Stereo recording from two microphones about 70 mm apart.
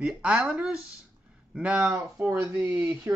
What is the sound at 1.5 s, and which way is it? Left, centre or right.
Speech, centre.